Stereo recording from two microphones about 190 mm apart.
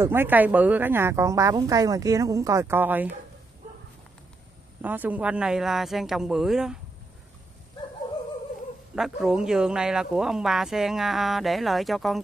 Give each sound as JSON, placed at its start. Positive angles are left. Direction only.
{"t": 0.0, "sound": "a woman's voice", "side_deg": -10}
{"t": 4.8, "sound": "speech", "side_deg": -10}
{"t": 8.9, "sound": "speech", "side_deg": 0}